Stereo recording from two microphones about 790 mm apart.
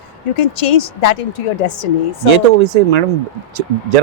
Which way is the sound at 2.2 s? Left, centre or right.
Right.